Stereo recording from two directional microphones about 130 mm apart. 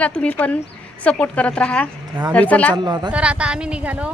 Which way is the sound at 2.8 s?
35° right (ahead or behind).